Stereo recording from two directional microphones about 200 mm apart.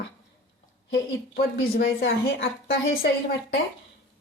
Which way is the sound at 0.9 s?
50° left (ahead or behind).